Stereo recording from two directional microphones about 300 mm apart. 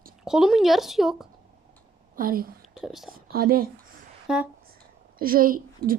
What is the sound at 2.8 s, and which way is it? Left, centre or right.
Speech, centre.